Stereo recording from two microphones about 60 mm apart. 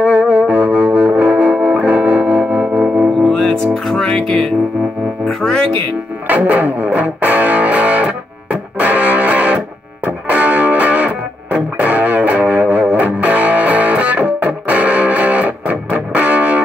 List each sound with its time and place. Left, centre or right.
0.0 s music: right
3.3 s music: centre
6.2 s music: right